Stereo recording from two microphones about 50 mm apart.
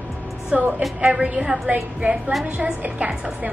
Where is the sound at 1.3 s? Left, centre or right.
Right.